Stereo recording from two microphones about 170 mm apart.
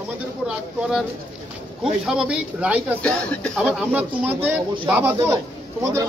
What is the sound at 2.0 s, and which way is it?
Speech, 5° right (ahead or behind).